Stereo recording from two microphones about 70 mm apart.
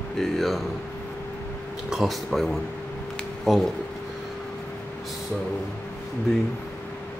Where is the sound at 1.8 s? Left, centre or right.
Centre.